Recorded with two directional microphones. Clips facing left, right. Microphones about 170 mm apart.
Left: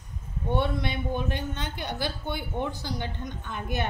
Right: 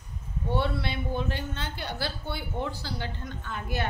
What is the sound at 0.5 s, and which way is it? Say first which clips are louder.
A woman's voice: left 2 dB; 15° left (ahead or behind).